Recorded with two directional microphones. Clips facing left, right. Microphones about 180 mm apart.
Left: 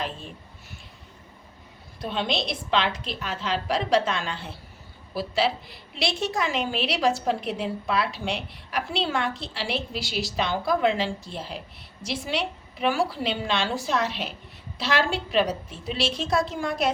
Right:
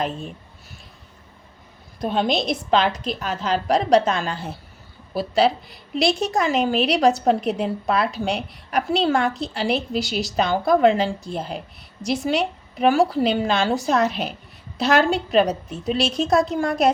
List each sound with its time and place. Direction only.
2.0 s a woman's voice: 45° right (ahead or behind)